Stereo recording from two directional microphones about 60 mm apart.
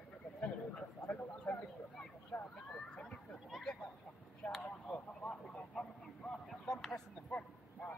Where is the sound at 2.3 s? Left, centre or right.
Left.